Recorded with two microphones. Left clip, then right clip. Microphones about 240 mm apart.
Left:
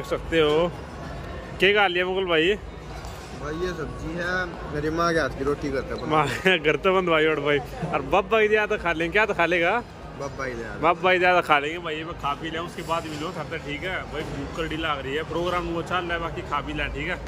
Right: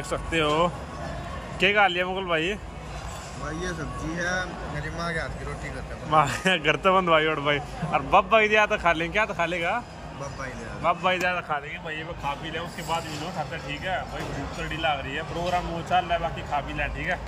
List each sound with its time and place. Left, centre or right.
0.1 s a man's voice: centre
4.9 s speech: left
6.1 s a man's voice: centre